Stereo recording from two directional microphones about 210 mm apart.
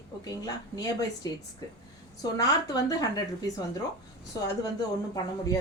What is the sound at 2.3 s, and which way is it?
Speech, 20° left (ahead or behind).